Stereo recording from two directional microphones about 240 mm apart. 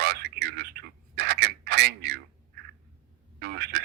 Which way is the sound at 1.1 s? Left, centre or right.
Right.